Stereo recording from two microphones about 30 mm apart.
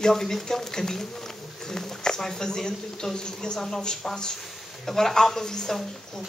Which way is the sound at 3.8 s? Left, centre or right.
Left.